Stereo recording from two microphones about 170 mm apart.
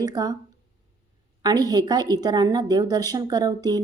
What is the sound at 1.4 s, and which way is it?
A woman's voice, 25° right (ahead or behind).